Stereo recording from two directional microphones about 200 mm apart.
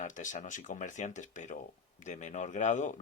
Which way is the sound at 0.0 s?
40° left (ahead or behind).